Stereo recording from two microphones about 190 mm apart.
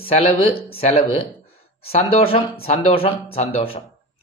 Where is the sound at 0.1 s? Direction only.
30° left (ahead or behind).